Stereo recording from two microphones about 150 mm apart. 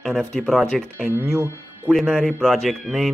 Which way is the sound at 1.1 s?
20° right (ahead or behind).